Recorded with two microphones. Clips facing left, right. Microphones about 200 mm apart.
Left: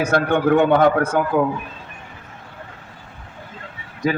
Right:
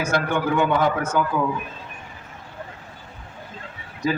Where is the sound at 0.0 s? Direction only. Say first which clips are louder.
Left 5 dB; 65° left (ahead or behind).